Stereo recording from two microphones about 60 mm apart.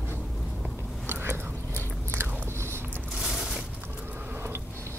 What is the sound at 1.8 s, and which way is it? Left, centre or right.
Biting, right.